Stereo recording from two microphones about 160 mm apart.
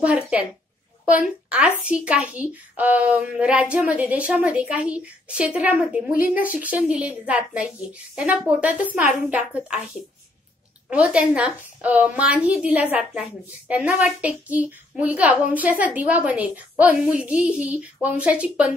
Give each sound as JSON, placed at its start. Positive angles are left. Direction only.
{"t": 0.0, "sound": "a woman's voice", "side_deg": -5}
{"t": 10.9, "sound": "a woman's voice", "side_deg": -5}